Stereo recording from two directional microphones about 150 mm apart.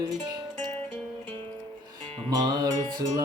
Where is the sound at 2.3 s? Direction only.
25° right (ahead or behind).